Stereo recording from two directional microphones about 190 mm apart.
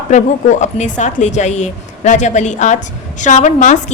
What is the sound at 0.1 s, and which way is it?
A woman's voice, 40° left (ahead or behind).